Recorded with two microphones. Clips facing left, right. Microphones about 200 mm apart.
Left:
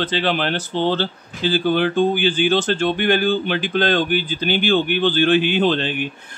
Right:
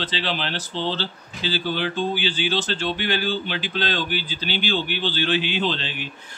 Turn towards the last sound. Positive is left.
turn(degrees=50)  # may be behind; listen again after turning